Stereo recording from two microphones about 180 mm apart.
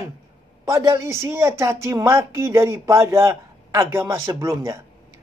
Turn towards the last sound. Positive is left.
turn(degrees=-15)  # may be behind; listen again after turning